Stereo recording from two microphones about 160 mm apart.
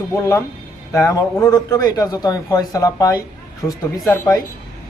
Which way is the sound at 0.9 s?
20° left (ahead or behind).